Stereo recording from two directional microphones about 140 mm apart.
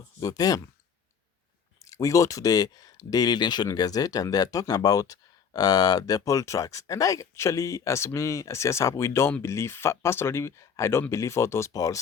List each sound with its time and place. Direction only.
0.2 s speech: 25° left (ahead or behind)
1.8 s speech: 25° left (ahead or behind)